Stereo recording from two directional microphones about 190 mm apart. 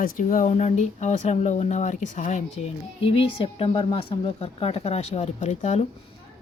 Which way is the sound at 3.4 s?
25° left (ahead or behind).